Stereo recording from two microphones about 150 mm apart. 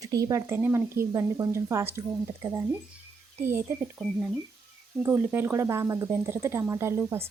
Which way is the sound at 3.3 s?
15° right (ahead or behind).